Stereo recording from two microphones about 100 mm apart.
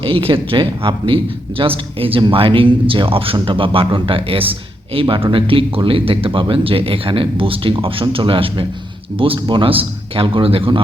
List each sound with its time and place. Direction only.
0.0 s speech: 65° right (ahead or behind)